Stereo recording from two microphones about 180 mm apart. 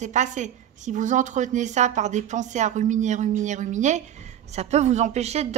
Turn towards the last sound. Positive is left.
turn(degrees=-35)  # may be behind; listen again after turning